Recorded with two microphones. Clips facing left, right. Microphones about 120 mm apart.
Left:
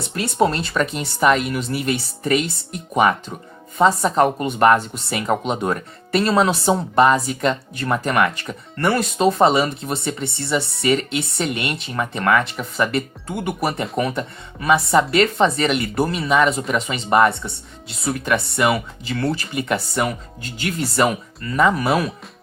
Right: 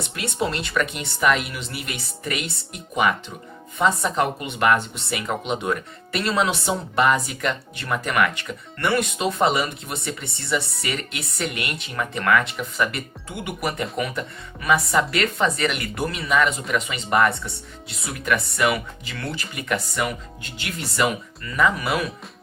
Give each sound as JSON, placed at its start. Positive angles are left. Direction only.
{"t": 0.1, "sound": "a woman's voice", "side_deg": 40}
{"t": 13.2, "sound": "a woman's voice", "side_deg": 45}
{"t": 20.0, "sound": "a woman's voice", "side_deg": 40}